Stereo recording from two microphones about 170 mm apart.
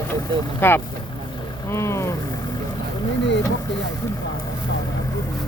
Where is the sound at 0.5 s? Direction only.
15° left (ahead or behind).